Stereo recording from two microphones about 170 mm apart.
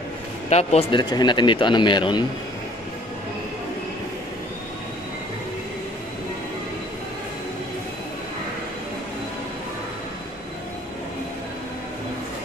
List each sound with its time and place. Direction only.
0.5 s speech: 40° left (ahead or behind)
1.1 s speech: 25° left (ahead or behind)